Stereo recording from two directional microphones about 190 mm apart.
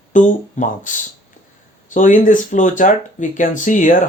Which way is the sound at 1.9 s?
45° left (ahead or behind).